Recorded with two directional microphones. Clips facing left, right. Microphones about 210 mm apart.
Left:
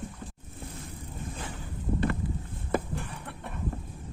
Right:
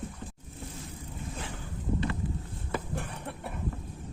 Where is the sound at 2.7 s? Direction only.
45° left (ahead or behind).